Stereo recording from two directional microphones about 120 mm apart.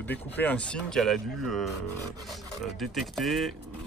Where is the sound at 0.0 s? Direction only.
15° left (ahead or behind).